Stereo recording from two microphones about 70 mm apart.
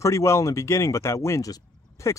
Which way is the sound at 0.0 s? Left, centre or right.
Left.